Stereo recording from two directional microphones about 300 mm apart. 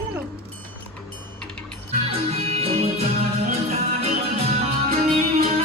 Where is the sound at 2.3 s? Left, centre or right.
Centre.